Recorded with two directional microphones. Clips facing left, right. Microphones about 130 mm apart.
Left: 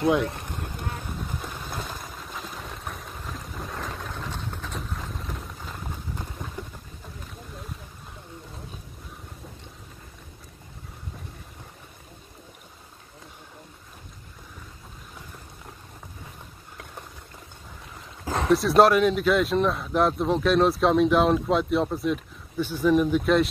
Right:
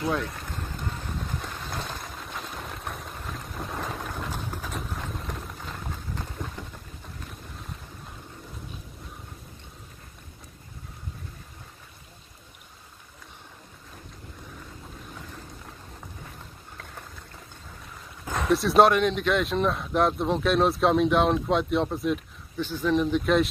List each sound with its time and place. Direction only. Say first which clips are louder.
0.0 s speech: left 6 dB; 20° left (ahead or behind)
0.6 s vehicle: left 1 dB; 10° left (ahead or behind)
18.2 s dog: left 3 dB; 30° left (ahead or behind)
18.5 s speech: left 1 dB; centre (ahead or behind)
22.6 s speech: left 3 dB; 10° left (ahead or behind)